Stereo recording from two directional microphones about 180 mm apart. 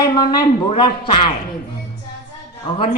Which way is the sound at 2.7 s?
30° left (ahead or behind).